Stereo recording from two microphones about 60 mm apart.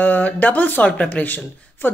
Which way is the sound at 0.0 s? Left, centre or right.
Left.